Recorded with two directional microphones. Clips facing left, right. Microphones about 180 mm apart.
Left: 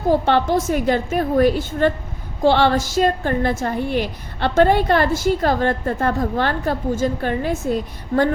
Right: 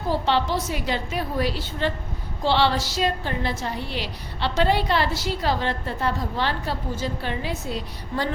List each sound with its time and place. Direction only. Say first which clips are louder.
0.1 s a woman's voice: left 6 dB; 50° left (ahead or behind)